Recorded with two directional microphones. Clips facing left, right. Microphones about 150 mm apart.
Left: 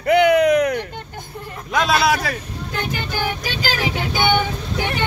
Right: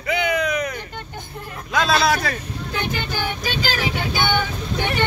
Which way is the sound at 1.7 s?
15° left (ahead or behind).